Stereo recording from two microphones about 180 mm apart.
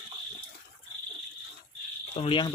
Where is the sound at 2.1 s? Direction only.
30° left (ahead or behind).